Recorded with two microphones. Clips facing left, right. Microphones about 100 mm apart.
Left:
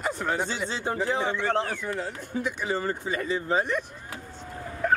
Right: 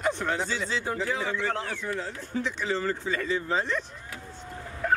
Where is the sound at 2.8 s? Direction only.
20° left (ahead or behind).